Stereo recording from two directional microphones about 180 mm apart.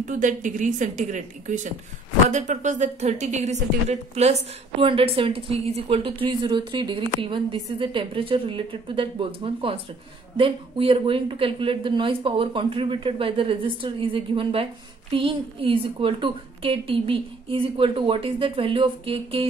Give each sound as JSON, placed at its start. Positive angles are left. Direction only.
{"t": 0.0, "sound": "a woman's voice", "side_deg": -45}